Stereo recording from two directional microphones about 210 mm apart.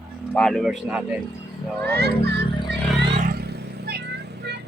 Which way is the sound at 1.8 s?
50° right (ahead or behind).